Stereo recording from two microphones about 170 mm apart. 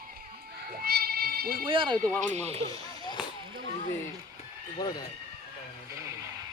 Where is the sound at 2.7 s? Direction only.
25° left (ahead or behind).